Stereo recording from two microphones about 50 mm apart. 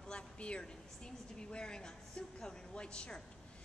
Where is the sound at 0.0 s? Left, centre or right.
Centre.